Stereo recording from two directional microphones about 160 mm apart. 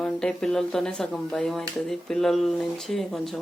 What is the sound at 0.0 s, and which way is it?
Speech, 5° left (ahead or behind).